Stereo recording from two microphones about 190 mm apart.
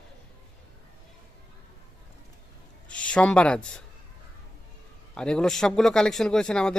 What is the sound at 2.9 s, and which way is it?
Speech, 5° left (ahead or behind).